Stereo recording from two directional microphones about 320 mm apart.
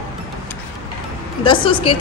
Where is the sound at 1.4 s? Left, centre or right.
Centre.